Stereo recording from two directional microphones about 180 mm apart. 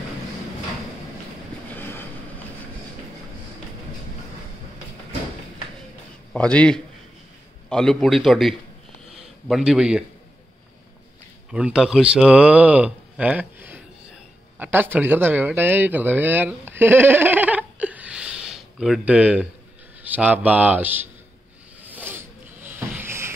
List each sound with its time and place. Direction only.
1.8 s vehicle: 10° left (ahead or behind)
6.3 s a man's voice: 5° left (ahead or behind)
11.5 s speech: 5° right (ahead or behind)
21.8 s snake: 10° right (ahead or behind)